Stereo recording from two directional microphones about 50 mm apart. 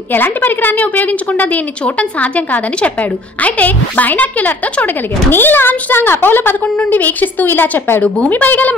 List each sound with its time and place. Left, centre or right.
0.1 s a woman's voice: left